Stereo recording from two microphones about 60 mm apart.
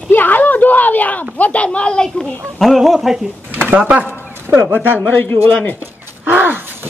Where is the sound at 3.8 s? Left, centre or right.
Centre.